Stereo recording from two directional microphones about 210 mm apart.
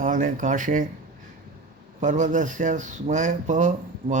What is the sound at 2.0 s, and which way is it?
Speech, 35° right (ahead or behind).